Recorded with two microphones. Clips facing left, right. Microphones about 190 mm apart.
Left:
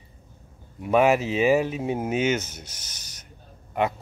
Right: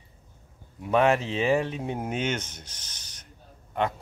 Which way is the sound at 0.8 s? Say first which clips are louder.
Left 3 dB; 5° left (ahead or behind).